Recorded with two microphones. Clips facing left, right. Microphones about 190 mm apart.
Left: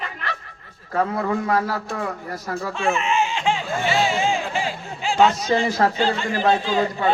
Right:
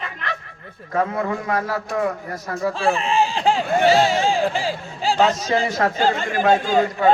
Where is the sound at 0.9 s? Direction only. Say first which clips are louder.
Even; 35° left (ahead or behind).